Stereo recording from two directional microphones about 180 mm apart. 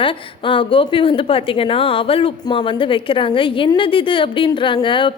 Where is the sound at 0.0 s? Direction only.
30° left (ahead or behind).